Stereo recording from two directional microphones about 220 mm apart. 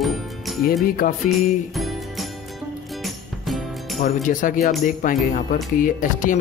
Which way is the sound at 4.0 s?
35° left (ahead or behind).